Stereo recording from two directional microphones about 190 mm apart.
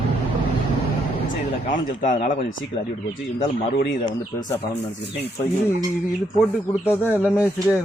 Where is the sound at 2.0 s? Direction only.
45° left (ahead or behind).